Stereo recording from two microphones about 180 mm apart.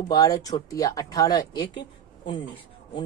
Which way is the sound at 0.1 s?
20° left (ahead or behind).